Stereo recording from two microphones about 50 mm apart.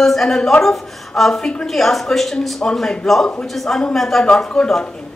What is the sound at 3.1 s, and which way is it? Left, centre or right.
A man's voice, centre.